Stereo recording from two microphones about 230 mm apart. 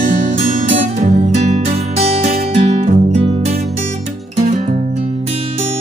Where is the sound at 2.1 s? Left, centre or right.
Right.